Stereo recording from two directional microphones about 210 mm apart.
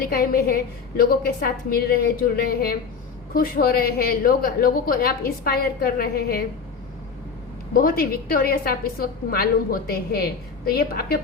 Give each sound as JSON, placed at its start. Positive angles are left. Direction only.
{"t": 0.0, "sound": "a woman's voice", "side_deg": 45}
{"t": 7.7, "sound": "a woman's voice", "side_deg": 45}